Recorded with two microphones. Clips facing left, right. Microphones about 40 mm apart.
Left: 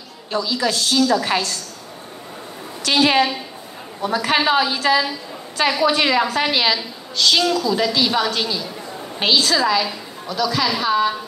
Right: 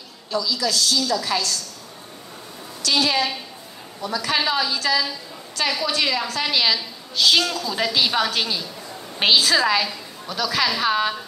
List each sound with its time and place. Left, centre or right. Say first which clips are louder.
0.3 s a woman's voice: left 3 dB; left
2.8 s a woman's voice: left 5 dB; left; by 6.8 s centre
7.2 s a woman's voice: left 2 dB; centre